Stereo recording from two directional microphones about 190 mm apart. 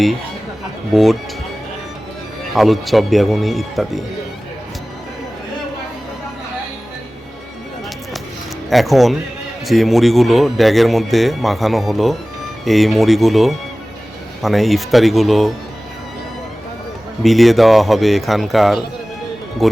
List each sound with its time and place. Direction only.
2.6 s speech: centre (ahead or behind)
8.7 s speech: centre (ahead or behind)
17.2 s speech: centre (ahead or behind)